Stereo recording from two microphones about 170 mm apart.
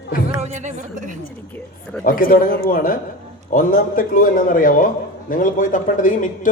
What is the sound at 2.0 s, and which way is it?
A man's voice, 55° left (ahead or behind).